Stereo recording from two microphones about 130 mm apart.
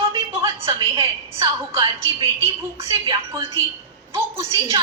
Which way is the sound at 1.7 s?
35° right (ahead or behind).